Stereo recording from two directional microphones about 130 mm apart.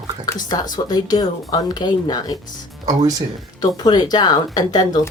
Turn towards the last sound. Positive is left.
turn(degrees=30)  # may be behind; listen again after turning